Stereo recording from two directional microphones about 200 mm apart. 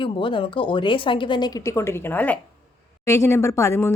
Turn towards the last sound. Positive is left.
turn(degrees=15)  # may be behind; listen again after turning